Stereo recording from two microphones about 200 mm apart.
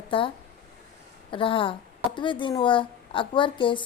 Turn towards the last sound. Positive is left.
turn(degrees=25)  # may be behind; listen again after turning